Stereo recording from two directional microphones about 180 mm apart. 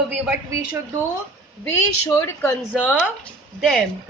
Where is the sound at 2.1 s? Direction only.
15° left (ahead or behind).